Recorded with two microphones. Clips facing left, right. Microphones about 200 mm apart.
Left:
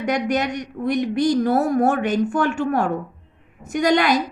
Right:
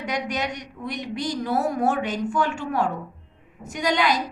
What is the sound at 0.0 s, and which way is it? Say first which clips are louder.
A woman's voice: left 6 dB; 50° left (ahead or behind).